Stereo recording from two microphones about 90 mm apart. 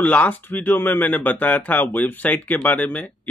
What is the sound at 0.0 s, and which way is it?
Speech, 20° left (ahead or behind).